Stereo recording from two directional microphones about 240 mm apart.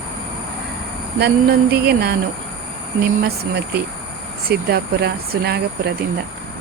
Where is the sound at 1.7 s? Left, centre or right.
Right.